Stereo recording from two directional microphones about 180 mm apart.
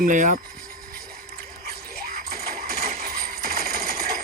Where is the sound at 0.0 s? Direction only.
45° right (ahead or behind).